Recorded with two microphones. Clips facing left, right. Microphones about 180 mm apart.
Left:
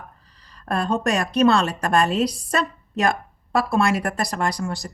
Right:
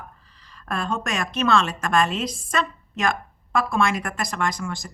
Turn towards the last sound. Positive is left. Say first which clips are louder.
# left 2 dB
turn(degrees=35)  # may be behind; listen again after turning